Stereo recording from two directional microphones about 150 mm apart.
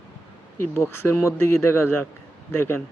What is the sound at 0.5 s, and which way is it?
Speech, 20° left (ahead or behind).